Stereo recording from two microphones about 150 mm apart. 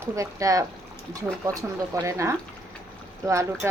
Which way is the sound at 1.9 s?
20° right (ahead or behind).